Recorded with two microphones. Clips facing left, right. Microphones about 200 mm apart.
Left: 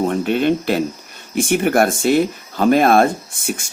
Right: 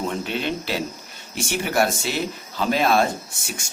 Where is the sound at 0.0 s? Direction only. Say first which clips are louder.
Left 9 dB; 55° left (ahead or behind).